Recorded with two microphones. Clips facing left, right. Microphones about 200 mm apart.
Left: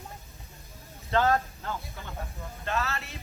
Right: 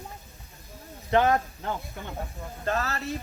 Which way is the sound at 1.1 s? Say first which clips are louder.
Right 3 dB; 15° right (ahead or behind).